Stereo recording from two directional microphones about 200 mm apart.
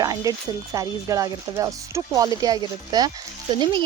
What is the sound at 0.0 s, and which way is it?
Speech, 20° right (ahead or behind).